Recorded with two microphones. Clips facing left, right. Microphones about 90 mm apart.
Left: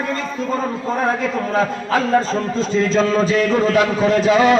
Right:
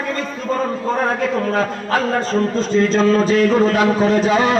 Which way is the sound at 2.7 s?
45° right (ahead or behind).